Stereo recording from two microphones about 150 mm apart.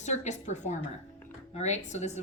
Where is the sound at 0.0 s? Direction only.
50° left (ahead or behind).